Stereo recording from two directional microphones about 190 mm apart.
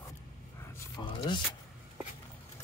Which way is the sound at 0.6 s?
20° left (ahead or behind).